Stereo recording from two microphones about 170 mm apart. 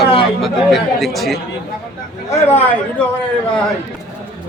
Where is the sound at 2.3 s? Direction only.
10° left (ahead or behind).